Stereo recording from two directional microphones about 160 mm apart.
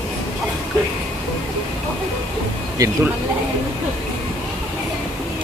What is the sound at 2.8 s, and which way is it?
Speech, 20° right (ahead or behind).